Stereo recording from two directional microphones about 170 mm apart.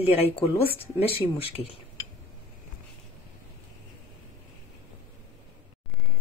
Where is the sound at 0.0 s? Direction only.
35° left (ahead or behind).